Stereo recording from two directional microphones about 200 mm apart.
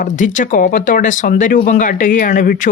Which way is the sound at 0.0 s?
40° left (ahead or behind).